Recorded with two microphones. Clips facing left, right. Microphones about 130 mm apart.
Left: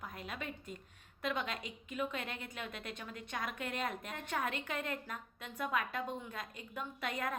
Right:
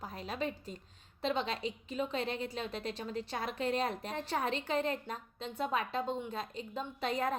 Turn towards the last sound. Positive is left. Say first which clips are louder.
# right 5 dB
turn(degrees=-30)  # may be behind; listen again after turning